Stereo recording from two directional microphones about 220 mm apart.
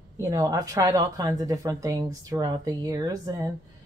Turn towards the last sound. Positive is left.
turn(degrees=-15)  # may be behind; listen again after turning